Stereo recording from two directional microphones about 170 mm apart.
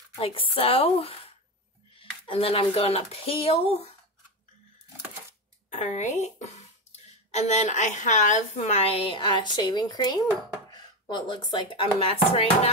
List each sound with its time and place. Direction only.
0.2 s a woman's voice: 35° left (ahead or behind)
5.7 s a woman's voice: 45° left (ahead or behind)